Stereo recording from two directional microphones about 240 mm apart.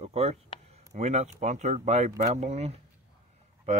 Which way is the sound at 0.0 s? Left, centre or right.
Right.